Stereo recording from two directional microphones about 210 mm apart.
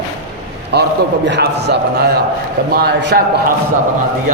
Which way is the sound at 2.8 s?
45° right (ahead or behind).